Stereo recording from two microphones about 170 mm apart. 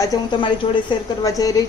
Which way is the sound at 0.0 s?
20° left (ahead or behind).